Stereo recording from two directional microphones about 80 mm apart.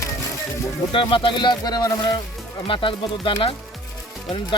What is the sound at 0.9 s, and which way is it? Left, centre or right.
Speech, left.